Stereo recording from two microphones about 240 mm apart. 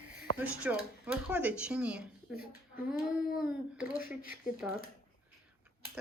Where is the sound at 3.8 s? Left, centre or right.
Centre.